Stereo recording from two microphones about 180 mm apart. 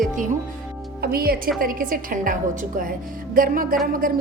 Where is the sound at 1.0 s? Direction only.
55° right (ahead or behind).